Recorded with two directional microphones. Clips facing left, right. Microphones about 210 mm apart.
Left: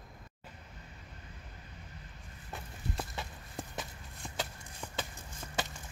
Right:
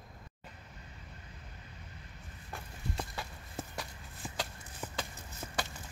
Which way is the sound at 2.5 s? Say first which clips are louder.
Even; centre (ahead or behind).